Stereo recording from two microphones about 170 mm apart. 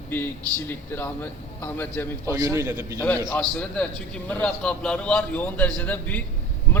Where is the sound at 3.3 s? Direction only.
10° left (ahead or behind).